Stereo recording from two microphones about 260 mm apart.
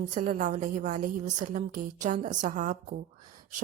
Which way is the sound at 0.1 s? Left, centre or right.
Right.